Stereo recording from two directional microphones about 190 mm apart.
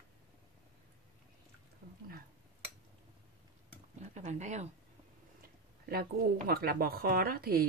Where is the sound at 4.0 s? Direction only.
40° right (ahead or behind).